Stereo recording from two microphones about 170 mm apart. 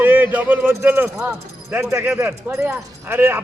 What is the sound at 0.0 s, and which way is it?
Speech, 10° right (ahead or behind).